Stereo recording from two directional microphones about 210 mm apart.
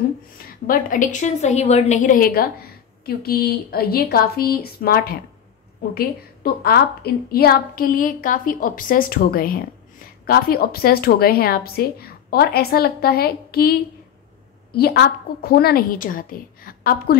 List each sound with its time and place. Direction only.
0.7 s a woman's voice: 40° left (ahead or behind)
14.8 s a woman's voice: 45° left (ahead or behind)